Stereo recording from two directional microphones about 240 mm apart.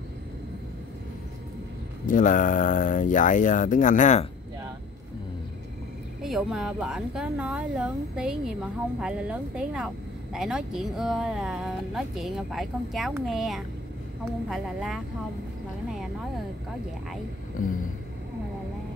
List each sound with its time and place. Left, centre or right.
2.0 s speech: left
6.2 s speech: centre
17.6 s speech: left